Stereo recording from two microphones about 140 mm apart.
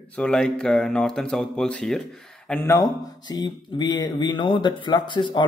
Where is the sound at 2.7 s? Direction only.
30° left (ahead or behind).